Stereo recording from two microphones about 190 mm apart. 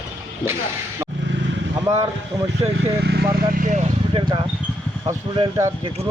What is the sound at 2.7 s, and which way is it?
Speech, 60° right (ahead or behind).